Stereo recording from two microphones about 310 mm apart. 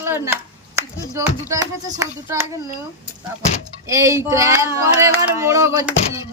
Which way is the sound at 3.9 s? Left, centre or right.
Centre.